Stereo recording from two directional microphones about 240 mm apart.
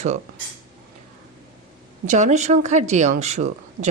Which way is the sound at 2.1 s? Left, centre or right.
Right.